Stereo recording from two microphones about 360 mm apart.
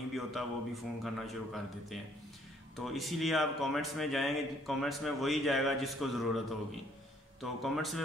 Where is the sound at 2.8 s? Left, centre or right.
Centre.